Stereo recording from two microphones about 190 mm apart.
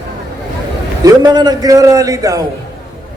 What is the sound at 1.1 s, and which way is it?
A man's voice, 20° right (ahead or behind).